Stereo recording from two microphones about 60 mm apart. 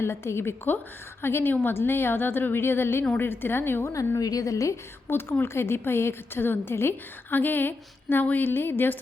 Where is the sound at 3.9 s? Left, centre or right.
Left.